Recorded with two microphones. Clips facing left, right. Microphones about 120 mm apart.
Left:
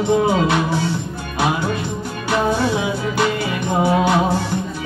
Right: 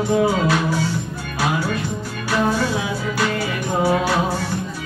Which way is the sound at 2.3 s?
25° left (ahead or behind).